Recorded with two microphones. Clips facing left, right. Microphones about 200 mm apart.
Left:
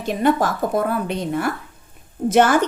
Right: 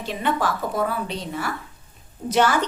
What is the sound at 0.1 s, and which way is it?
A woman's voice, 45° left (ahead or behind).